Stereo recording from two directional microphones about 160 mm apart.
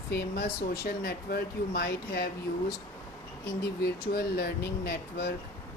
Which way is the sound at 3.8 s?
75° left (ahead or behind).